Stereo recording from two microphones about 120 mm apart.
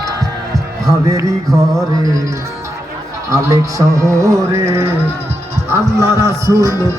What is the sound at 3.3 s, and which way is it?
Music, 25° right (ahead or behind).